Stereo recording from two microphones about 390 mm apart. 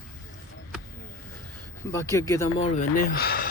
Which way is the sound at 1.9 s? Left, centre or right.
Centre.